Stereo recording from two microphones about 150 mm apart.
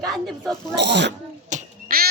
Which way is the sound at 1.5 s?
80° right.